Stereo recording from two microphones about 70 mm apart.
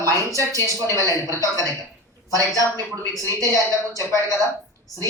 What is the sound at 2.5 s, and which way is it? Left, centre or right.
Speech, left.